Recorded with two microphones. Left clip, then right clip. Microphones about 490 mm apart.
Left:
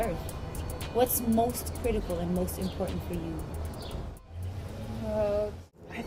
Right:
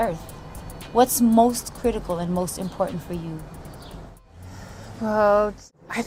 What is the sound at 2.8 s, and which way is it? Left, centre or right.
Speech, right.